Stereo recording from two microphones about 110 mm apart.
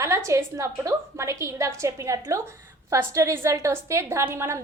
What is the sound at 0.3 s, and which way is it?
A woman's voice, 25° right (ahead or behind).